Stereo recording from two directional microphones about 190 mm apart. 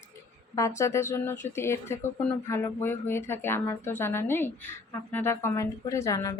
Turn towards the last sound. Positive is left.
turn(degrees=15)  # may be behind; listen again after turning